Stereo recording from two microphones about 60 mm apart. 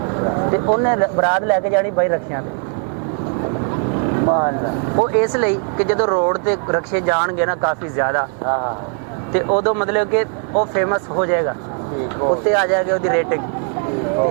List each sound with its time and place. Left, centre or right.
0.1 s speech: right
3.9 s speech: centre